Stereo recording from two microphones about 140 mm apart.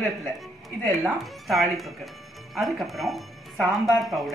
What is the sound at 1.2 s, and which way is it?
Speech, centre (ahead or behind).